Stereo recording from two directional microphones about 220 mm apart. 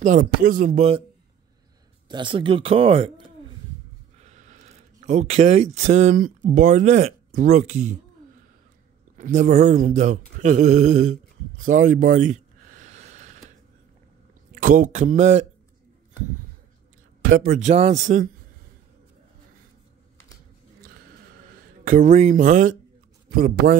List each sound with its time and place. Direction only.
0.0 s speech: 35° right (ahead or behind)
2.0 s speech: 20° right (ahead or behind)
4.2 s a sound: 30° right (ahead or behind)
5.9 s speech: 30° right (ahead or behind)
9.1 s speech: 35° right (ahead or behind)
10.4 s a sound: 35° right (ahead or behind)
14.5 s speech: 40° right (ahead or behind)
17.2 s speech: 40° right (ahead or behind)
21.8 s speech: 35° right (ahead or behind)